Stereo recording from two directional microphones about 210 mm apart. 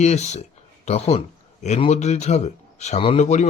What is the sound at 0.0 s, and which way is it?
A man's voice, 30° left (ahead or behind).